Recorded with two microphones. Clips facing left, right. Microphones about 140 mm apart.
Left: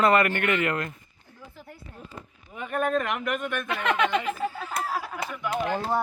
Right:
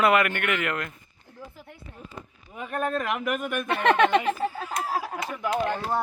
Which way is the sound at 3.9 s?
35° right (ahead or behind).